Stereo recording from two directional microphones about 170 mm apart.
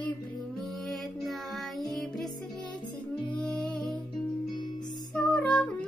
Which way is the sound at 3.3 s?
5° left (ahead or behind).